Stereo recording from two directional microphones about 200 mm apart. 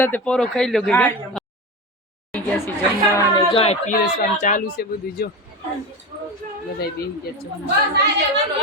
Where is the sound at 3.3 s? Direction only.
30° left (ahead or behind); by 5.3 s 50° left (ahead or behind).